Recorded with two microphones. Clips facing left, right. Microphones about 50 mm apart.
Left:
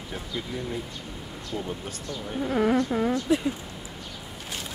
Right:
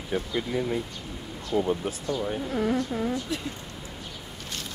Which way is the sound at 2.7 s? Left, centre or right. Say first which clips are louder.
Left 4 dB; centre.